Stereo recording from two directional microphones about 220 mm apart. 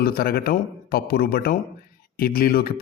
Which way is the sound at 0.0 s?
45° left (ahead or behind).